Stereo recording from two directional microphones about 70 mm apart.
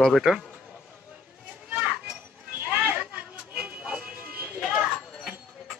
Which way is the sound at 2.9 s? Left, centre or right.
Centre.